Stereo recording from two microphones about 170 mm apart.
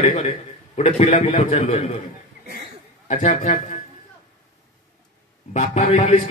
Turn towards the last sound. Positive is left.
turn(degrees=40)  # may be behind; listen again after turning